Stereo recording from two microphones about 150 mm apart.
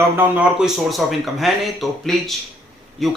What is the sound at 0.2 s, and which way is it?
A man's voice, 5° right (ahead or behind).